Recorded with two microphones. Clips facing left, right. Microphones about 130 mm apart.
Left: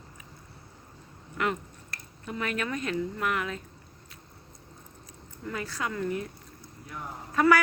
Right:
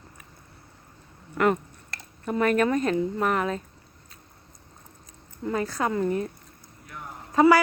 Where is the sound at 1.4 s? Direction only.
45° right (ahead or behind).